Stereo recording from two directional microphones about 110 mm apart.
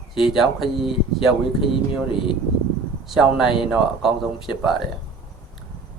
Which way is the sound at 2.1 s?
50° left (ahead or behind).